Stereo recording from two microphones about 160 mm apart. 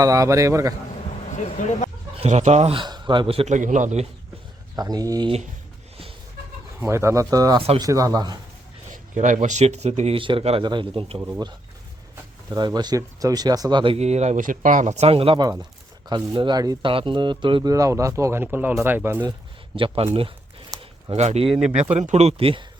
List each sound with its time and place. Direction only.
0.0 s speech: 20° right (ahead or behind)
1.3 s speech: 50° left (ahead or behind)
2.1 s speech: 45° right (ahead or behind)
4.8 s speech: 25° right (ahead or behind)
6.7 s speech: 15° right (ahead or behind)
8.9 s speech: 50° right (ahead or behind)
10.2 s speech: 35° right (ahead or behind)
11.2 s speech: 20° right (ahead or behind)
19.7 s speech: 35° right (ahead or behind)
21.1 s speech: 45° right (ahead or behind)